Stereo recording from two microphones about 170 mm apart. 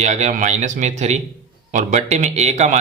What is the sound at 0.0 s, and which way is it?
A man's voice, 45° right (ahead or behind).